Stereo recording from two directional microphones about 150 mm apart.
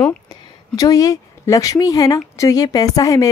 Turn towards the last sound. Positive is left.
turn(degrees=25)  # may be behind; listen again after turning